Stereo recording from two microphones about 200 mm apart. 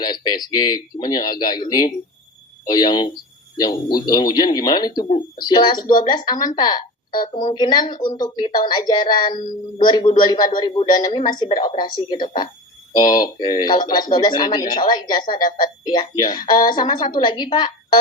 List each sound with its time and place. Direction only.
0.0 s a woman's voice: 20° left (ahead or behind)
2.6 s a woman's voice: 20° left (ahead or behind)
6.6 s a sound: 20° left (ahead or behind)
7.3 s a woman's voice: 20° left (ahead or behind)